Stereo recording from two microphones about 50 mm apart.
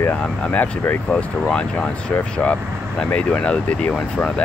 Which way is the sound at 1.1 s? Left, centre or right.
Centre.